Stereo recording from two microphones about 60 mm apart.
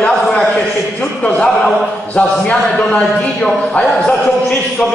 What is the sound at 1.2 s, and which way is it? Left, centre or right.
A man's voice, left.